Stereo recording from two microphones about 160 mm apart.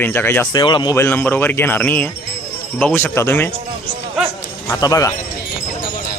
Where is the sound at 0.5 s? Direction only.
30° left (ahead or behind).